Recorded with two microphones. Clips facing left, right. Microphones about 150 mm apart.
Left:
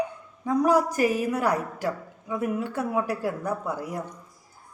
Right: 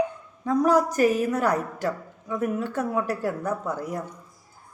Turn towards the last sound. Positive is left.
turn(degrees=10)  # may be behind; listen again after turning